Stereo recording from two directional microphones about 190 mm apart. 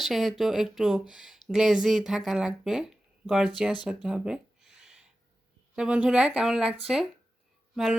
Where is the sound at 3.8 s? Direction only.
5° right (ahead or behind).